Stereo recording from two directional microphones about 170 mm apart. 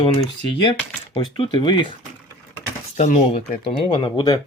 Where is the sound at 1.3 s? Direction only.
25° left (ahead or behind).